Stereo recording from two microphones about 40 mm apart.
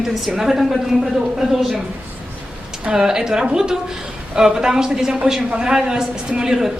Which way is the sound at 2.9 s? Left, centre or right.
Centre.